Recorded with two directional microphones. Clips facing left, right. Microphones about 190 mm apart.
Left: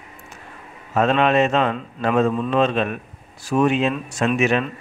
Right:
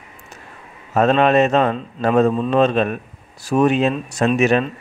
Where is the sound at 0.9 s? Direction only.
40° right (ahead or behind).